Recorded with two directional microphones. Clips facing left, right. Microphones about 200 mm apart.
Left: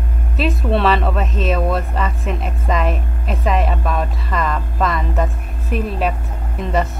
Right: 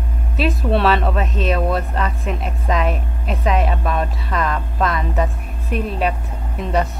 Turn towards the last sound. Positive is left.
turn(degrees=0)  # may be behind; listen again after turning